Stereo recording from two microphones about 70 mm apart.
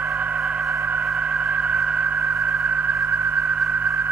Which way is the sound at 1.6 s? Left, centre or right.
Centre.